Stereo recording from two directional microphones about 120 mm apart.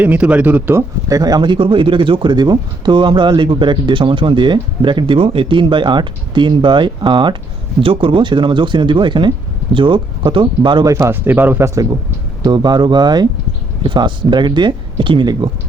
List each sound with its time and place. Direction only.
0.0 s speech: 10° right (ahead or behind)
0.8 s speech: 25° right (ahead or behind)
10.8 s speech: 25° right (ahead or behind); by 15.4 s 40° right (ahead or behind)